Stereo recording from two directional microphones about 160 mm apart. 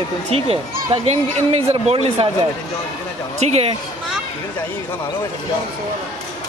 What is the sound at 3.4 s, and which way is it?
Speech, 40° right (ahead or behind).